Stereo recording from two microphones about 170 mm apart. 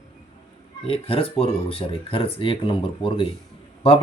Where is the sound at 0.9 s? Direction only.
35° left (ahead or behind).